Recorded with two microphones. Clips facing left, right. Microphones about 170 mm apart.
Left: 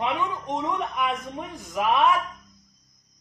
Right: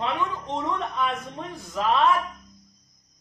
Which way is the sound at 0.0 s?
15° left (ahead or behind).